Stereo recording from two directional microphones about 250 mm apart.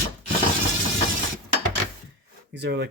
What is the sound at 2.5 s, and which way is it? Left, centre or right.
Speech, right.